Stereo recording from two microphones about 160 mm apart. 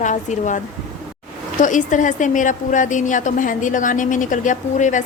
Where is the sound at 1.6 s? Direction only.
50° left (ahead or behind).